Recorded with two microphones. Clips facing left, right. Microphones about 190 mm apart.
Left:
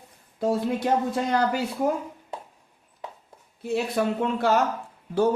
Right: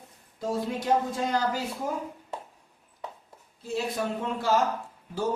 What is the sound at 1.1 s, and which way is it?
Speech, 65° left (ahead or behind).